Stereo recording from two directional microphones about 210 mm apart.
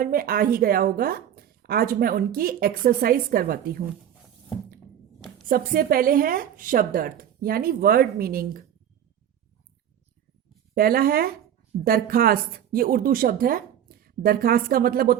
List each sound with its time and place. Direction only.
0.0 s a woman's voice: 45° right (ahead or behind)
5.5 s a woman's voice: 45° right (ahead or behind)
10.8 s a woman's voice: 45° right (ahead or behind)